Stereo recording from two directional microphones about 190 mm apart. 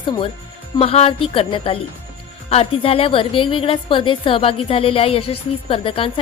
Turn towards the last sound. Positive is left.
turn(degrees=30)  # may be behind; listen again after turning